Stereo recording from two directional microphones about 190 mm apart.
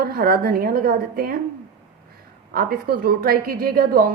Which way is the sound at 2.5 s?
50° right (ahead or behind).